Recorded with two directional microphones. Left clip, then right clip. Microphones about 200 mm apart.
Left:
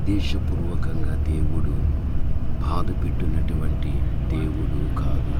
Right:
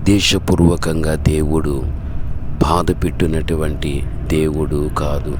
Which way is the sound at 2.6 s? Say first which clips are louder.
Right 15 dB; 55° right (ahead or behind).